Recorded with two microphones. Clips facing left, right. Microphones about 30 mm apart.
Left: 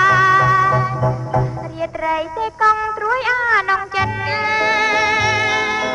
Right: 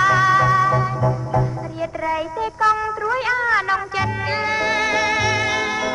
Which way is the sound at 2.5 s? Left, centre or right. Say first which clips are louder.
Left 3 dB; centre.